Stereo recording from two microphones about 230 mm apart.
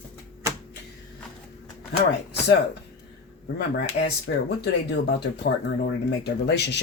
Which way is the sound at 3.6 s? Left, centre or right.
Left.